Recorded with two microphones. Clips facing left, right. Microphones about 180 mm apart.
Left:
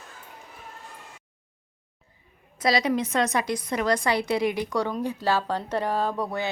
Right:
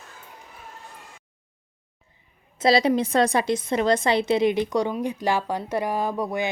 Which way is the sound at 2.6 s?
30° right (ahead or behind).